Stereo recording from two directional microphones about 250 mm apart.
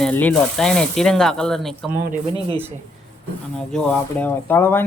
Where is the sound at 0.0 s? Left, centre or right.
Centre.